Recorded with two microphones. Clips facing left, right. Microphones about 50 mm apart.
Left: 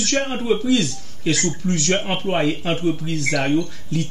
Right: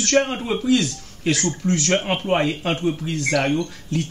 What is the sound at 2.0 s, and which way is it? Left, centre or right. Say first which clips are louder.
Speech: even; centre.